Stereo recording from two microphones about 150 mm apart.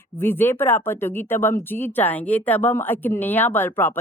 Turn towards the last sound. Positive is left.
turn(degrees=15)  # may be behind; listen again after turning